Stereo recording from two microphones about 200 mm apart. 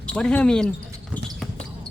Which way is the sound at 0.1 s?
5° left (ahead or behind).